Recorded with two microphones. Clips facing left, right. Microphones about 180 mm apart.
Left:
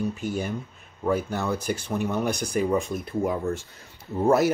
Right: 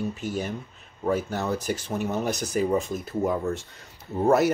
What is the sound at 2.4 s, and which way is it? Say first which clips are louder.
Speech: even; 5° right (ahead or behind).